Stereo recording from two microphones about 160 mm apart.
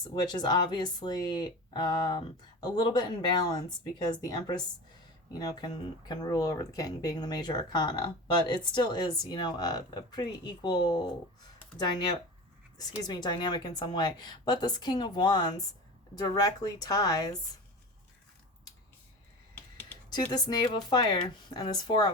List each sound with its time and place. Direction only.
0.0 s speech: 25° left (ahead or behind)
13.0 s speech: 25° left (ahead or behind)
20.1 s speech: 25° left (ahead or behind)